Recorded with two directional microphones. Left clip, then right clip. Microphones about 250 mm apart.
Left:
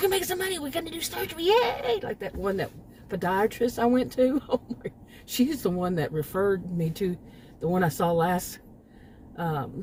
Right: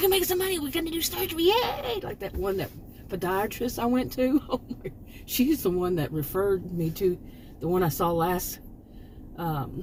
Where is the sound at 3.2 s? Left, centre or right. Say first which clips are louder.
Left 3 dB; left.